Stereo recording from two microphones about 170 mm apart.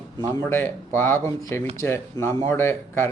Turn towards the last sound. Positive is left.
turn(degrees=15)  # may be behind; listen again after turning